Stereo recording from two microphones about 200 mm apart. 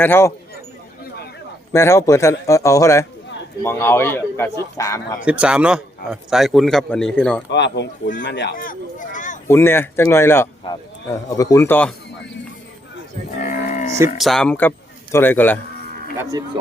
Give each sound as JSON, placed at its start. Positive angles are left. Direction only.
{"t": 0.0, "sound": "a man's voice", "side_deg": 10}
{"t": 1.7, "sound": "a man's voice", "side_deg": 15}
{"t": 5.2, "sound": "a man's voice", "side_deg": -5}
{"t": 7.5, "sound": "speech", "side_deg": 60}
{"t": 9.5, "sound": "a man's voice", "side_deg": 10}
{"t": 13.4, "sound": "cattle", "side_deg": 40}
{"t": 14.2, "sound": "a man's voice", "side_deg": 0}